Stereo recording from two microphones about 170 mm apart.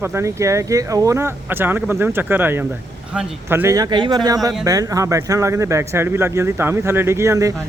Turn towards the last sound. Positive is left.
turn(degrees=-15)  # may be behind; listen again after turning